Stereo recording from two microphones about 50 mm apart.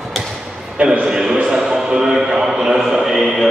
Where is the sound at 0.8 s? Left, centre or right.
Centre.